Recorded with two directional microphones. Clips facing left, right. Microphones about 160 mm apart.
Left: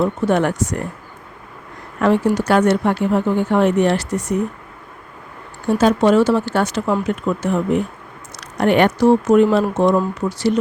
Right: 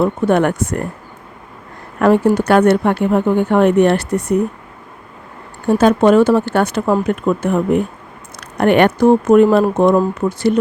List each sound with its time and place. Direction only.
0.0 s speech: 55° right (ahead or behind)
2.0 s speech: 50° right (ahead or behind)
5.6 s speech: 55° right (ahead or behind)